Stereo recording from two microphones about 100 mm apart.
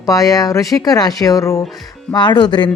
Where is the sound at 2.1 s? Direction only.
50° left (ahead or behind).